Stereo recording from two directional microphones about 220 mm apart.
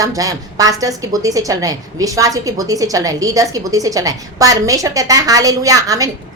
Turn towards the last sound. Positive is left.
turn(degrees=-15)  # may be behind; listen again after turning